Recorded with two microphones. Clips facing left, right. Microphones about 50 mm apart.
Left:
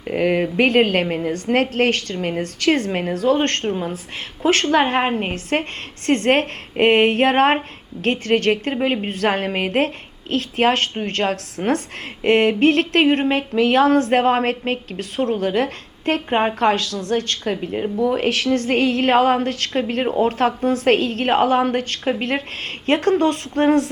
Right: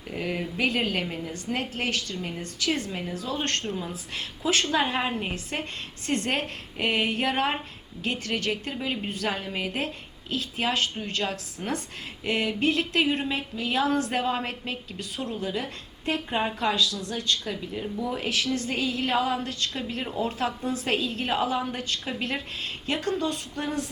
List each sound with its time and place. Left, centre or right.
0.1 s a woman's voice: left
22.9 s a woman's voice: left